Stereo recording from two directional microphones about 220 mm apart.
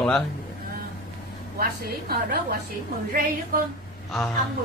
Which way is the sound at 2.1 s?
45° right (ahead or behind).